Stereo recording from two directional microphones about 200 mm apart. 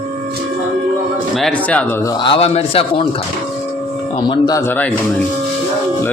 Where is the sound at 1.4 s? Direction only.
5° left (ahead or behind).